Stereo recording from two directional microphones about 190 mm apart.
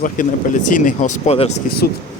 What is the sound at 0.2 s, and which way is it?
Speech, 45° left (ahead or behind).